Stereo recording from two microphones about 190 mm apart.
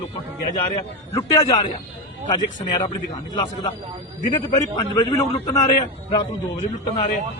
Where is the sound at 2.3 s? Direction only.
20° left (ahead or behind).